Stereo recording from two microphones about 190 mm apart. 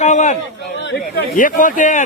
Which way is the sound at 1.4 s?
45° left (ahead or behind).